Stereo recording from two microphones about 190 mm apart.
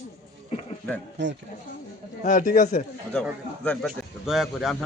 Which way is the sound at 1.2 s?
70° right (ahead or behind).